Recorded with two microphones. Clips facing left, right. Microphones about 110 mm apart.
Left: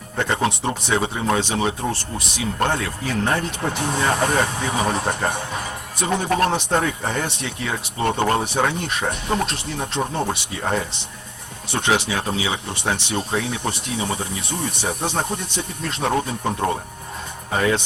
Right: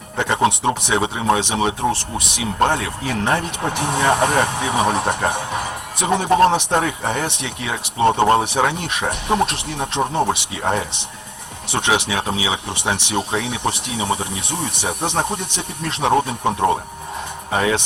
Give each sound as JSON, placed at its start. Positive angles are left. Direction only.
{"t": 0.2, "sound": "speech", "side_deg": -15}